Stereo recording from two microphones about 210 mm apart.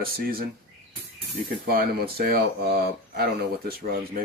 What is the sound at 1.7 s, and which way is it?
Speech, 45° right (ahead or behind).